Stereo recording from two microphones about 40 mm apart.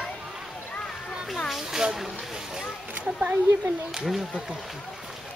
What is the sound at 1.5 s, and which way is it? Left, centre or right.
Speech, centre.